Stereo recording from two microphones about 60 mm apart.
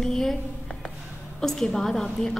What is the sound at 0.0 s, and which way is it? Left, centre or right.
Speech, centre.